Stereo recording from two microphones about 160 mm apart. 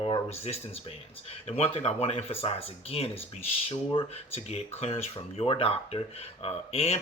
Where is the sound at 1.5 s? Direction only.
40° left (ahead or behind).